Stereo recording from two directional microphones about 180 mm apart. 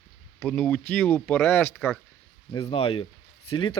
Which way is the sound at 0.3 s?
5° left (ahead or behind).